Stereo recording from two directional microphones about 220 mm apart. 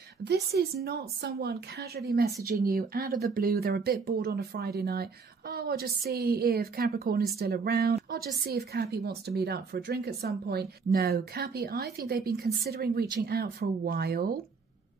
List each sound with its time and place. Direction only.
0.2 s speech: 50° right (ahead or behind)